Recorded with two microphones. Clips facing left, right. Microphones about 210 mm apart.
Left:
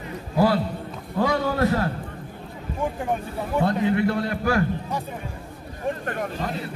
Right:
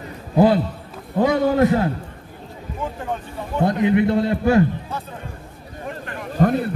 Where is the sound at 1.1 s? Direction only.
20° right (ahead or behind).